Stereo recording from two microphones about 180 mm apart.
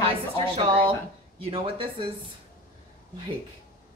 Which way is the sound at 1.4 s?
30° right (ahead or behind).